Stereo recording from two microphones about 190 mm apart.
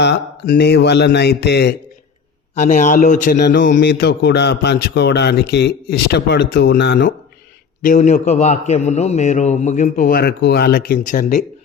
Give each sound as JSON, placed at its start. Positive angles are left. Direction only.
{"t": 0.0, "sound": "a man's voice", "side_deg": 55}
{"t": 2.6, "sound": "speech", "side_deg": 40}
{"t": 3.3, "sound": "a man's voice", "side_deg": 60}
{"t": 7.9, "sound": "a man's voice", "side_deg": 40}